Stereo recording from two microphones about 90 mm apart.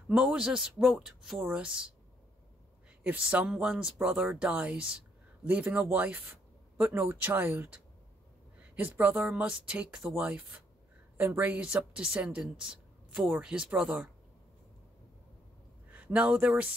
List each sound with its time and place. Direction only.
0.2 s a woman's voice: 10° right (ahead or behind)
3.0 s a woman's voice: 15° right (ahead or behind)
9.3 s a woman's voice: 10° right (ahead or behind)
15.9 s a man's voice: 15° right (ahead or behind)